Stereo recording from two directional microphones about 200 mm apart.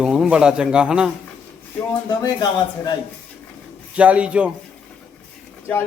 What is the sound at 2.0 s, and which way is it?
Speech, 20° left (ahead or behind).